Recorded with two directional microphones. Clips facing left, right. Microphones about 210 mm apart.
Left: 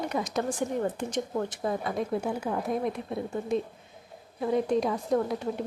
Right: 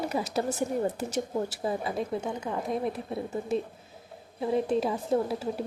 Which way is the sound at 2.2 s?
5° left (ahead or behind).